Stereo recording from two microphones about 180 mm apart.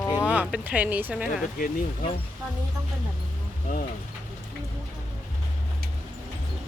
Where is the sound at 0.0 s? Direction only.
15° left (ahead or behind).